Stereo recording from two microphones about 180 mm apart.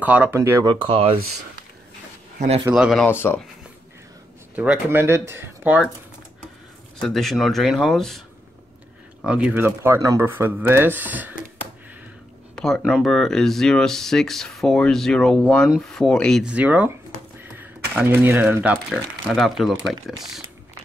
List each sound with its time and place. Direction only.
0.0 s speech: 10° right (ahead or behind)
0.7 s speech: 30° right (ahead or behind)
2.3 s speech: 40° right (ahead or behind)
2.7 s speech: centre (ahead or behind)
3.1 s speech: 10° left (ahead or behind)
4.6 s speech: 10° right (ahead or behind)
7.0 s speech: centre (ahead or behind)
9.2 s speech: 5° right (ahead or behind)
12.5 s speech: 5° left (ahead or behind)